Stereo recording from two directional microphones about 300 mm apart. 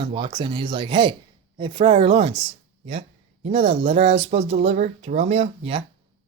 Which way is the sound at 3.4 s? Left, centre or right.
Centre.